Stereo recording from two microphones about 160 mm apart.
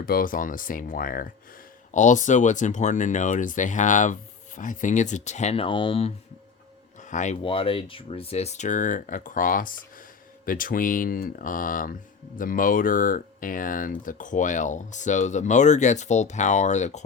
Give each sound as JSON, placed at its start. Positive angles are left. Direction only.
{"t": 0.0, "sound": "speech", "side_deg": 65}
{"t": 1.9, "sound": "speech", "side_deg": 50}
{"t": 7.1, "sound": "speech", "side_deg": 50}
{"t": 7.4, "sound": "speech", "side_deg": 35}